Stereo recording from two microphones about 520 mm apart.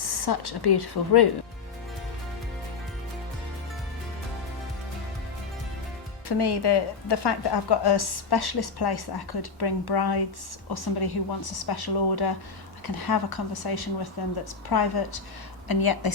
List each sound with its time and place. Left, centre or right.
0.0 s a woman's voice: left
6.2 s a woman's voice: left